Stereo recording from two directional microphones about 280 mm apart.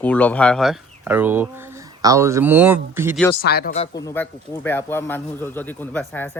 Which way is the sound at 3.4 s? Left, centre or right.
Left.